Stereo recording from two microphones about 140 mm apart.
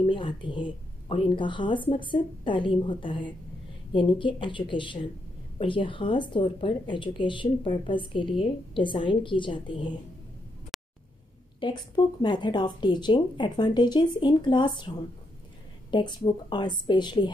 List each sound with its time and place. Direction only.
0.0 s speech: 35° left (ahead or behind)
10.7 s a sound: centre (ahead or behind)
11.6 s speech: 35° left (ahead or behind)